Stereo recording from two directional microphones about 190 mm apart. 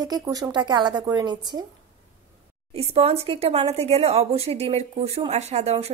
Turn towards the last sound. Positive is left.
turn(degrees=-35)  # may be behind; listen again after turning